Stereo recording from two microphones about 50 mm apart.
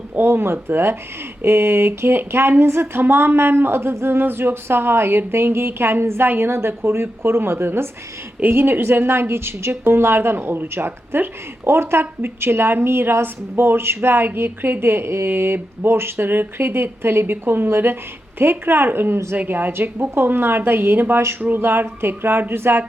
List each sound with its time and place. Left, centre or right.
0.2 s a woman's voice: right
10.3 s speech: right